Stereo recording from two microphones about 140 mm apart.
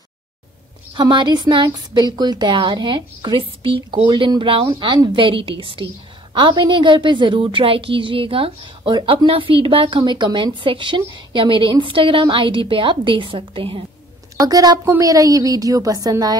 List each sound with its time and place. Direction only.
0.9 s a woman's voice: 35° right (ahead or behind)
14.4 s a woman's voice: 25° right (ahead or behind)